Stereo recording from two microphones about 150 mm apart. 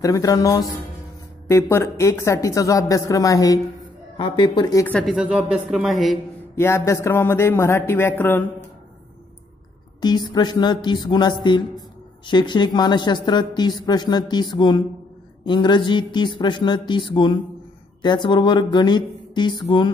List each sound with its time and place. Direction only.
0.0 s speech: 25° left (ahead or behind)
5.0 s a man's voice: 5° right (ahead or behind)
6.5 s speech: 15° left (ahead or behind)
10.0 s speech: 30° left (ahead or behind)